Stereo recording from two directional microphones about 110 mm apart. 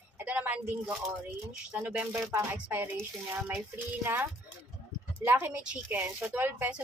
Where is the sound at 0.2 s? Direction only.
15° right (ahead or behind).